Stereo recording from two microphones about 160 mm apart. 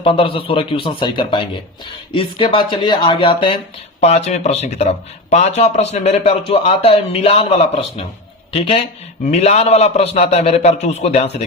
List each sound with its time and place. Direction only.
0.0 s speech: 35° left (ahead or behind)
4.0 s speech: 40° left (ahead or behind)